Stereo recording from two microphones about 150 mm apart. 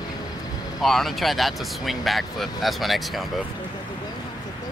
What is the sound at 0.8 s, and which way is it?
Speech, centre (ahead or behind).